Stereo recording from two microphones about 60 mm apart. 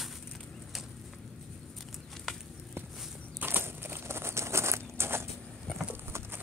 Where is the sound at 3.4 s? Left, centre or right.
Right.